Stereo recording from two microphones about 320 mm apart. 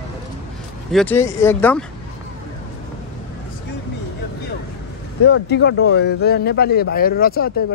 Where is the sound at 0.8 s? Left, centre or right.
Centre.